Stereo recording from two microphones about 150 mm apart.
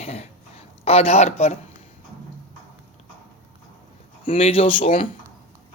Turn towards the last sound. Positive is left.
turn(degrees=35)  # may be behind; listen again after turning